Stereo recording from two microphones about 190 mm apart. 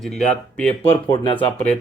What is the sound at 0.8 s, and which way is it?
Speech, 30° left (ahead or behind).